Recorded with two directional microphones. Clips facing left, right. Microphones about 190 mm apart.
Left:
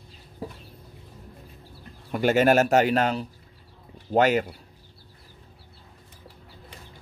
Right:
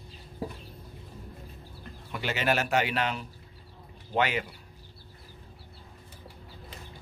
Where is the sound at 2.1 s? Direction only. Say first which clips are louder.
Left 10 dB; 45° left (ahead or behind).